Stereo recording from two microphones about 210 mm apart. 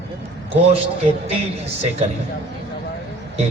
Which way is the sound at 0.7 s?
30° right (ahead or behind).